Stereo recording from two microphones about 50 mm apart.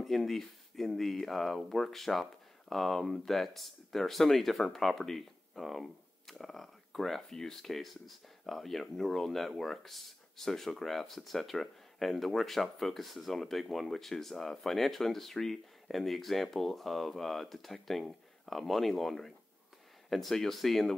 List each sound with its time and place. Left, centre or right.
0.0 s speech: centre